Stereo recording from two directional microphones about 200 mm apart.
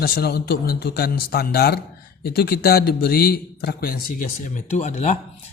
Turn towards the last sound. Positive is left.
turn(degrees=35)  # may be behind; listen again after turning